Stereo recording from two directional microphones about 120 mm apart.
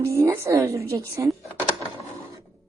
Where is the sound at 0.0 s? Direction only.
20° right (ahead or behind).